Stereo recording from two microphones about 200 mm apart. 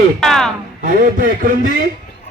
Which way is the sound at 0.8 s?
40° right (ahead or behind).